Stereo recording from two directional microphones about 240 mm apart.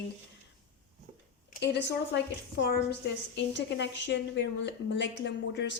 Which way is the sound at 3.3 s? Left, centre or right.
Left.